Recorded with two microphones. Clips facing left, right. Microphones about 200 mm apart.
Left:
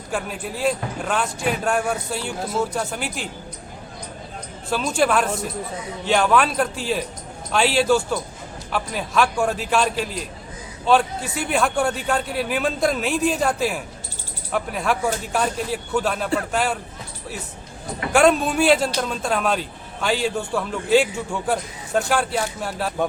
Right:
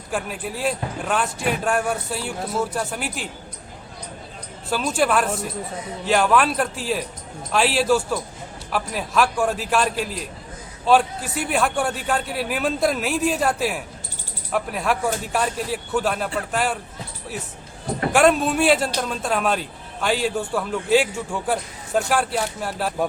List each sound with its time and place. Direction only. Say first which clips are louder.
0.1 s a man's voice: even; centre (ahead or behind)
4.7 s a man's voice: left 1 dB; centre (ahead or behind)
18.1 s a man's voice: left 1 dB; centre (ahead or behind)